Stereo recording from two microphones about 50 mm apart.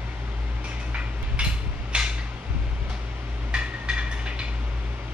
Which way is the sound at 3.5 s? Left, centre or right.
Centre.